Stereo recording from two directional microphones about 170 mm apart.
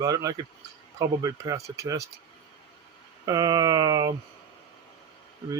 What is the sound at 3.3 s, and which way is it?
Speech, 20° right (ahead or behind).